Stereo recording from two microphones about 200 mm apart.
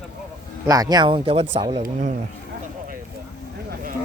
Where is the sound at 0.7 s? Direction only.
20° right (ahead or behind).